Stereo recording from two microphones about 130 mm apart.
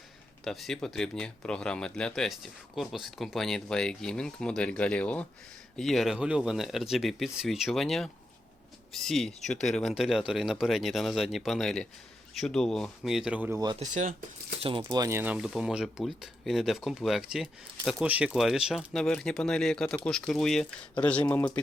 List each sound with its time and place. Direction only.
0.4 s speech: centre (ahead or behind)
13.5 s speech: 30° right (ahead or behind)
13.7 s speech: 70° right (ahead or behind)
14.6 s speech: 45° right (ahead or behind)
14.8 s speech: 30° right (ahead or behind)
15.2 s speech: 10° right (ahead or behind); by 21.6 s 10° left (ahead or behind)